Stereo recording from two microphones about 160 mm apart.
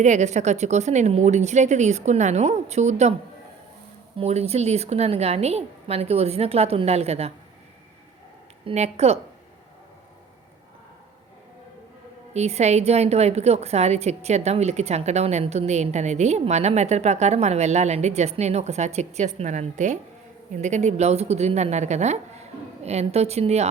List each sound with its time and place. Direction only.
0.0 s a woman's voice: 45° right (ahead or behind)
4.2 s a woman's voice: 40° right (ahead or behind)
8.6 s a woman's voice: 40° right (ahead or behind)
12.3 s a woman's voice: 45° right (ahead or behind)